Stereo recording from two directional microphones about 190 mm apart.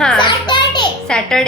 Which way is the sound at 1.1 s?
5° left (ahead or behind).